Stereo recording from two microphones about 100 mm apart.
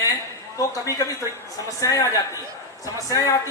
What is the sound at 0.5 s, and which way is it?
Speech, 35° left (ahead or behind).